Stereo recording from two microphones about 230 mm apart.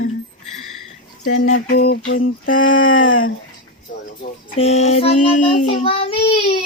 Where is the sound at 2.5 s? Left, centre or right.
Left.